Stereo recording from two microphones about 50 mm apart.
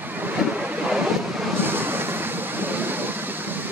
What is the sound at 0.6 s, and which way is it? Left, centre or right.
Waves, right.